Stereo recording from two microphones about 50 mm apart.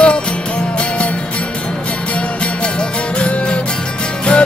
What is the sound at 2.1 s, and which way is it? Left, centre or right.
Music, left.